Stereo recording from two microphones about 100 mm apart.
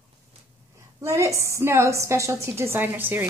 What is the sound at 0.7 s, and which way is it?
A woman's voice, 30° right (ahead or behind).